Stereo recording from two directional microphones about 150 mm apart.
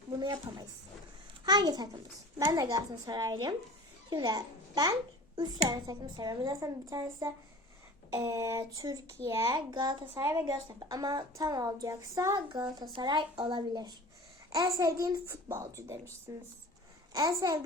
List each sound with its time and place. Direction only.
0.2 s a sound: 30° right (ahead or behind)
1.5 s a child's voice: 25° right (ahead or behind)
9.6 s a woman's voice: 30° right (ahead or behind)
10.2 s a woman's voice: 15° right (ahead or behind)
10.4 s a woman's voice: 30° right (ahead or behind)